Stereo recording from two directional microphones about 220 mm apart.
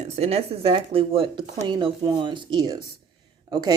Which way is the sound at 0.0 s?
30° right (ahead or behind).